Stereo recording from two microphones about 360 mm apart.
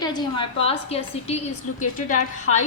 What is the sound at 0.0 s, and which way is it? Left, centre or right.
A woman's voice, centre.